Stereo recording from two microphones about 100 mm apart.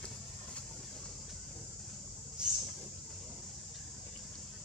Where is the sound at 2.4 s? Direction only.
10° right (ahead or behind).